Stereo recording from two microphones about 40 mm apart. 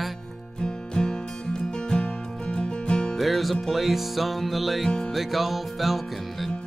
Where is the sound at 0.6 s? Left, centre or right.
Centre.